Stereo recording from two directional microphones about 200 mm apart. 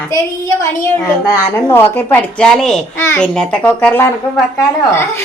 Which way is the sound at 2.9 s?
10° left (ahead or behind).